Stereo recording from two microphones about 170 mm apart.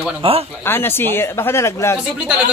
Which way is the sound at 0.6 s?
15° left (ahead or behind).